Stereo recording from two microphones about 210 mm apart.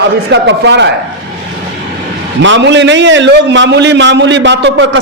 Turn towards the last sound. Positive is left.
turn(degrees=-55)  # may be behind; listen again after turning